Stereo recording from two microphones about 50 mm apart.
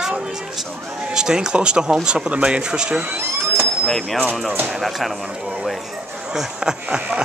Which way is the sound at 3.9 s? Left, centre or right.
Centre.